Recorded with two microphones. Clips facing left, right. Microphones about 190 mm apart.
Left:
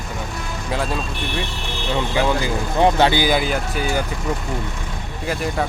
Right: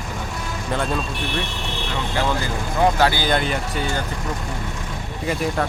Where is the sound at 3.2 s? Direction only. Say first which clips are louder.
Left 2 dB; 5° left (ahead or behind).